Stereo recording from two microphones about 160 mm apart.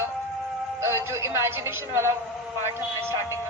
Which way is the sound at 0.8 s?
15° right (ahead or behind).